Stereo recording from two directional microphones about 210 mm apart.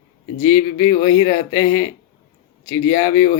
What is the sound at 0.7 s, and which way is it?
Speech, 20° left (ahead or behind).